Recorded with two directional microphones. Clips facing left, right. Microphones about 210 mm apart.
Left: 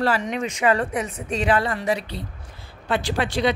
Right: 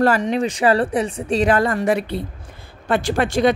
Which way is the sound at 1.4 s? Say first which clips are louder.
Right 3 dB; 45° right (ahead or behind).